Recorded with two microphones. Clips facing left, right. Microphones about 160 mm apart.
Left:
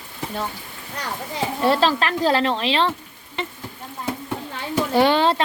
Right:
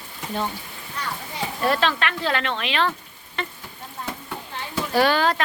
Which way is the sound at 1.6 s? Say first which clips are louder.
Left 3 dB; 30° left (ahead or behind).